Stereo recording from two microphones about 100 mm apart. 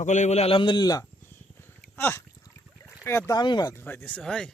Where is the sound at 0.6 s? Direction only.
50° left (ahead or behind).